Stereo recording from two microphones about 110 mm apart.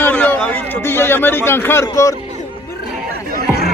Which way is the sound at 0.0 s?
15° left (ahead or behind).